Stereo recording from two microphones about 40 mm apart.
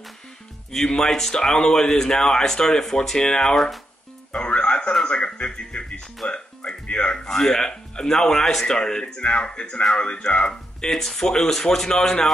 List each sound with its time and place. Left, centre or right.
1.3 s speech: centre
4.3 s music: left
5.0 s speech: left
7.2 s speech: centre; by 10.5 s left
10.9 s speech: centre